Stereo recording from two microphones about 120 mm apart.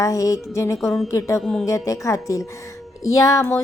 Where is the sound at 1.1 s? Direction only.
25° left (ahead or behind).